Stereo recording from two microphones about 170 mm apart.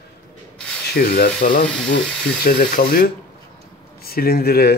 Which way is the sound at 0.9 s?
65° left (ahead or behind).